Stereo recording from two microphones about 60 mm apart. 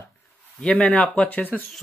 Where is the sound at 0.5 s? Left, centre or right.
Centre.